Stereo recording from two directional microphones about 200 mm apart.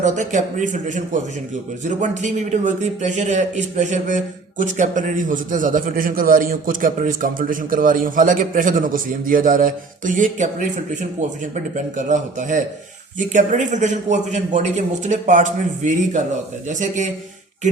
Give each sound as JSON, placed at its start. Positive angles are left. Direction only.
{"t": 0.0, "sound": "a man's voice", "side_deg": -40}
{"t": 11.9, "sound": "a man's voice", "side_deg": -40}